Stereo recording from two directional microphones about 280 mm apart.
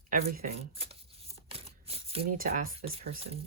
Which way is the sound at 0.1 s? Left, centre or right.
Right.